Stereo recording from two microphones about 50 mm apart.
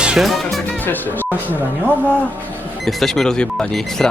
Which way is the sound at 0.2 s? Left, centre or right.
Centre.